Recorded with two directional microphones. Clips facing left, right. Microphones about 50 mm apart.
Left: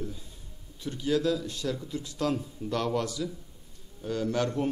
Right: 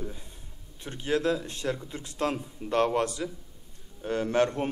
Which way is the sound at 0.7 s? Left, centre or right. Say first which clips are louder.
Left 1 dB; right.